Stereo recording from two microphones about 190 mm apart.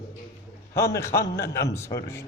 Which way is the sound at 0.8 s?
15° left (ahead or behind).